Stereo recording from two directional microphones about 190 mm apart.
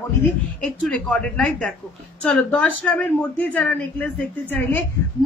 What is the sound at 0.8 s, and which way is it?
Speech, 5° left (ahead or behind).